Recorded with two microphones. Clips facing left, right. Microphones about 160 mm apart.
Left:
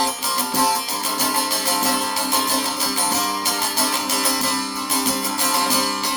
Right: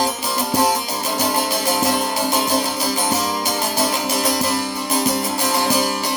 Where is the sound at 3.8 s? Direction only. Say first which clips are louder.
Right 3 dB; 15° right (ahead or behind).